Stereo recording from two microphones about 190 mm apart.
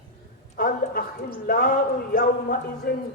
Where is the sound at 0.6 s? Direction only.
50° left (ahead or behind).